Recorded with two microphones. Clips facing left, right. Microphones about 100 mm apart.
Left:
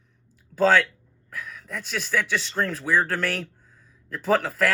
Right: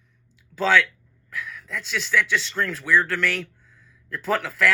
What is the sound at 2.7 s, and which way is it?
Speech, 40° left (ahead or behind).